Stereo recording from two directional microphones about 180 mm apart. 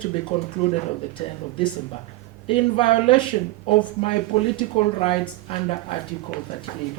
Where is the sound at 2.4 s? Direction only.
30° left (ahead or behind).